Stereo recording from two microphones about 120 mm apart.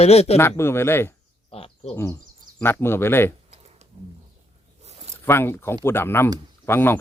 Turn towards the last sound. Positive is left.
turn(degrees=20)  # may be behind; listen again after turning